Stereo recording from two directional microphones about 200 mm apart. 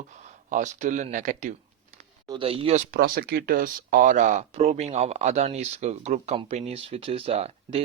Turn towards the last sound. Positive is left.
turn(degrees=-30)  # may be behind; listen again after turning